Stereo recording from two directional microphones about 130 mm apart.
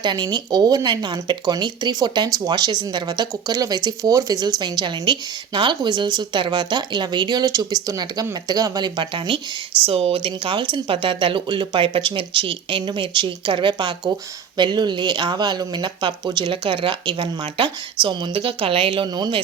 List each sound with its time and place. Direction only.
0.0 s speech: 35° right (ahead or behind)